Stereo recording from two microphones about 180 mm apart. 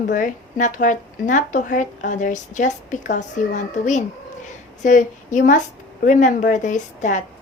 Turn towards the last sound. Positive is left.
turn(degrees=45)  # may be behind; listen again after turning